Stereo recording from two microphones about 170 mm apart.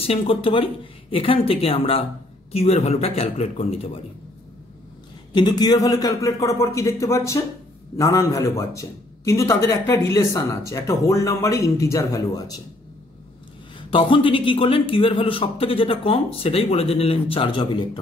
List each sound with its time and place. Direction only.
0.0 s a man's voice: 35° left (ahead or behind)
5.3 s a man's voice: 25° left (ahead or behind)
13.7 s a man's voice: 30° left (ahead or behind)